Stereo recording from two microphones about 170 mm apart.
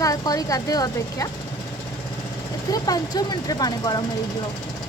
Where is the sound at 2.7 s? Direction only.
20° left (ahead or behind).